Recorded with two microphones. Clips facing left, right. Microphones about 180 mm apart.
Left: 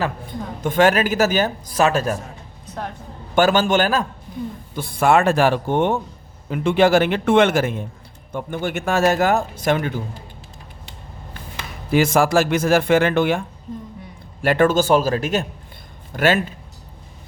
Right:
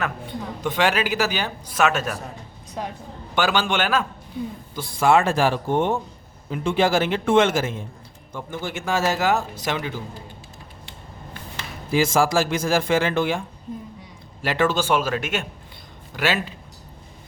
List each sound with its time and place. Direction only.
0.3 s speech: 45° left (ahead or behind)
2.6 s a sound: 10° right (ahead or behind)
3.3 s speech: 45° left (ahead or behind)
4.7 s a man's voice: 60° left (ahead or behind)
11.9 s a man's voice: 60° left (ahead or behind)
14.4 s speech: 50° left (ahead or behind)
16.1 s speech: 50° left (ahead or behind)